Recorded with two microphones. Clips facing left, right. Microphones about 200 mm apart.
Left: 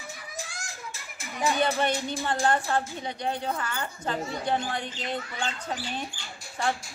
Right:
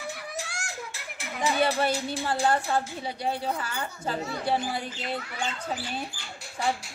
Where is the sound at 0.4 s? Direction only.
70° right (ahead or behind).